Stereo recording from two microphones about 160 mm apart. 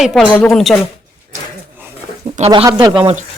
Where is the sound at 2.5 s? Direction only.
30° right (ahead or behind).